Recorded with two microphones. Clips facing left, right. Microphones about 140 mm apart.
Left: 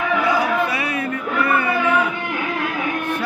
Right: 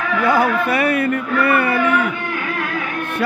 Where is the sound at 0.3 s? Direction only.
55° right (ahead or behind).